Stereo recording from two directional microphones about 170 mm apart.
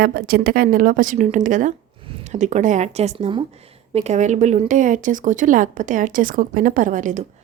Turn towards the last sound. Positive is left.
turn(degrees=-45)  # may be behind; listen again after turning